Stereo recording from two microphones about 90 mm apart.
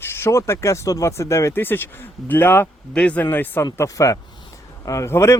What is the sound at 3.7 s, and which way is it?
Speech, 40° left (ahead or behind).